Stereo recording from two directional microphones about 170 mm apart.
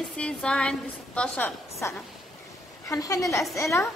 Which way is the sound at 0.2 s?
5° left (ahead or behind).